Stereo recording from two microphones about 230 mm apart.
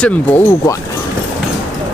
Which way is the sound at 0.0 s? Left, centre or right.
Centre.